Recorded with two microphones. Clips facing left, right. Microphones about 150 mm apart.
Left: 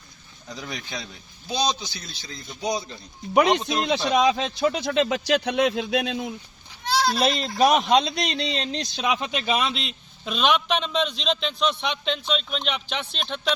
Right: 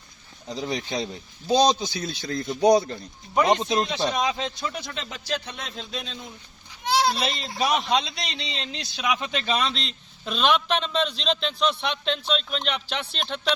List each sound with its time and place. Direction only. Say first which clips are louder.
0.4 s a man's voice: right 6 dB; 25° right (ahead or behind); by 3.0 s 60° right (ahead or behind)
4.1 s speech: left 6 dB; 80° left
6.8 s goat: right 1 dB; 20° right (ahead or behind)
7.2 s a man's voice: left 6 dB; 45° left (ahead or behind)
9.0 s a man's voice: left 1 dB; 20° left (ahead or behind); by 13.5 s centre (ahead or behind)